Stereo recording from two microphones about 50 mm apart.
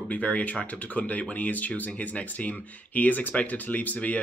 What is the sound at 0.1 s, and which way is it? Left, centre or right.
Speech, left.